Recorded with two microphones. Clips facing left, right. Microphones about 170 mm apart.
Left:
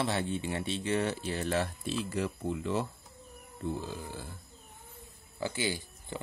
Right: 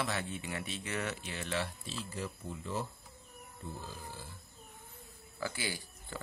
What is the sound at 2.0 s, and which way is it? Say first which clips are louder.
Speech: left 7 dB; 75° left (ahead or behind).